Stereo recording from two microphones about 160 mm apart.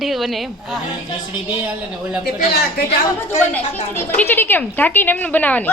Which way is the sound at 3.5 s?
10° left (ahead or behind).